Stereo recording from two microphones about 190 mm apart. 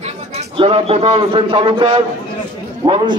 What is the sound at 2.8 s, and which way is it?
Speech, 25° right (ahead or behind).